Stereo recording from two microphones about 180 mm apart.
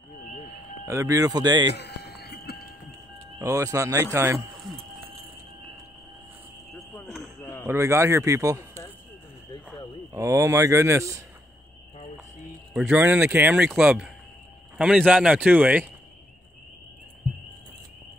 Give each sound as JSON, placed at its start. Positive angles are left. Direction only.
{"t": 0.8, "sound": "speech", "side_deg": -15}
{"t": 1.7, "sound": "a sound", "side_deg": 65}
{"t": 3.3, "sound": "speech", "side_deg": -15}
{"t": 7.6, "sound": "speech", "side_deg": -15}
{"t": 10.1, "sound": "speech", "side_deg": -15}
{"t": 12.7, "sound": "speech", "side_deg": -5}